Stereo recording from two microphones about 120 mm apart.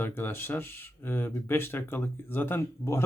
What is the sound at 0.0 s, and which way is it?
Speech, 20° left (ahead or behind).